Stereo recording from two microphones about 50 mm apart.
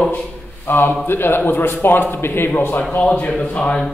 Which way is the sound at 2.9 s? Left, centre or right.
Left.